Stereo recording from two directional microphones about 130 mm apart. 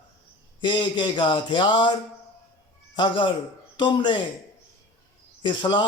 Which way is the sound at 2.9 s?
40° left (ahead or behind).